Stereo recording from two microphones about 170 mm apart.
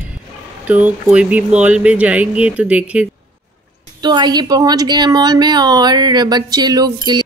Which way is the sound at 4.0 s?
25° right (ahead or behind).